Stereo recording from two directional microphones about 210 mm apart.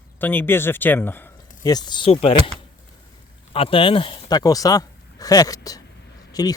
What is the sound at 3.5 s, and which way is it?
Speech, 25° left (ahead or behind).